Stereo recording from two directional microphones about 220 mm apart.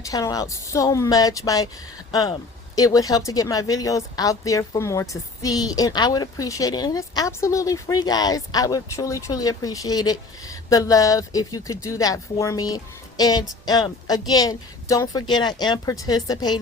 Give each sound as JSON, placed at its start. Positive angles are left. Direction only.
{"t": 0.0, "sound": "speech", "side_deg": 15}